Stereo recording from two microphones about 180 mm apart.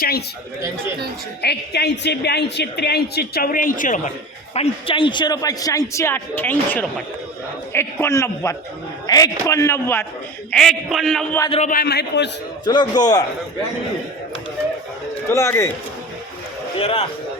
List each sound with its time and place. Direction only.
1.4 s speech: 65° left (ahead or behind); by 4.1 s 45° left (ahead or behind)
4.5 s a man's voice: 30° left (ahead or behind); by 10.1 s 15° left (ahead or behind)
10.5 s a man's voice: centre (ahead or behind)
11.7 s a man's voice: 60° left (ahead or behind)
12.6 s a man's voice: 25° left (ahead or behind)
15.3 s a man's voice: 15° left (ahead or behind)
16.7 s a man's voice: 30° left (ahead or behind)